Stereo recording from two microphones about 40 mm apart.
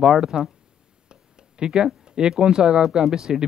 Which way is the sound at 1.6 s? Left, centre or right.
Centre.